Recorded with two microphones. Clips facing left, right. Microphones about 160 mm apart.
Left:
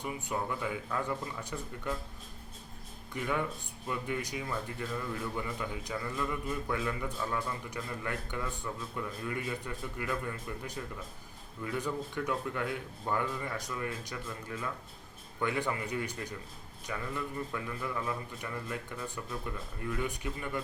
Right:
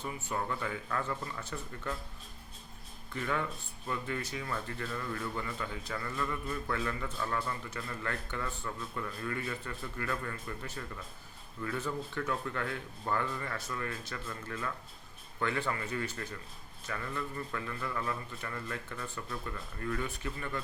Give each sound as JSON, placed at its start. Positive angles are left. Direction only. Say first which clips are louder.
{"t": 0.0, "sound": "speech", "louder": "left 1 dB", "side_deg": 10}
{"t": 3.1, "sound": "speech", "louder": "left 1 dB", "side_deg": 15}